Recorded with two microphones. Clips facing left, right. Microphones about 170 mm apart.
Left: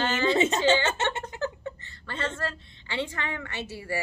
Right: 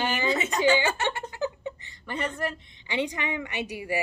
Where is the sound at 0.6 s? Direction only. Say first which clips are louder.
Right 1 dB; 15° right (ahead or behind).